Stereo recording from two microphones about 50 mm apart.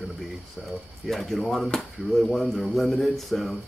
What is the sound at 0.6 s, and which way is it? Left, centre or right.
Speech, right.